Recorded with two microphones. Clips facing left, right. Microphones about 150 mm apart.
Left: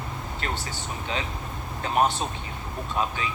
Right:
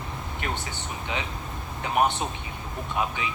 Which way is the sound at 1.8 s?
20° right (ahead or behind).